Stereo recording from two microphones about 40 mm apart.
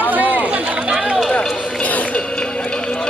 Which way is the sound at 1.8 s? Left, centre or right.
Left.